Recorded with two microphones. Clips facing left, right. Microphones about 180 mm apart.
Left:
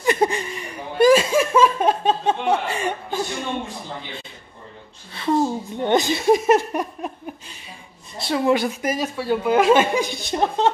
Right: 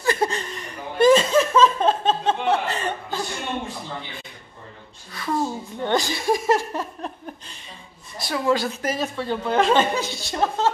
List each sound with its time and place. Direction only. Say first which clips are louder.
0.0 s laughter: left 3 dB; 20° left (ahead or behind)
5.1 s a woman's voice: left 5 dB; 25° left (ahead or behind)